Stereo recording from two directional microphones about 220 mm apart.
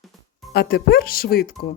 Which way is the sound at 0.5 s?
45° left (ahead or behind).